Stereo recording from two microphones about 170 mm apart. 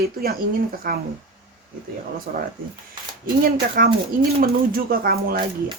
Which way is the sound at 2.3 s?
55° right (ahead or behind).